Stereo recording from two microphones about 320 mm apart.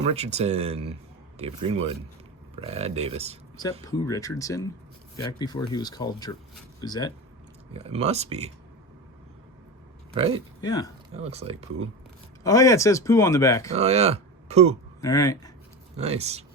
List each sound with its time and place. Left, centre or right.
0.0 s speech: centre
3.6 s speech: centre
7.7 s speech: centre
10.6 s speech: centre
11.1 s speech: centre
12.4 s speech: centre
13.7 s speech: centre
15.0 s speech: centre
16.0 s speech: centre